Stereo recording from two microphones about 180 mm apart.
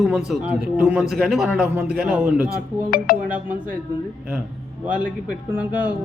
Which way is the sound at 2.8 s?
55° left (ahead or behind).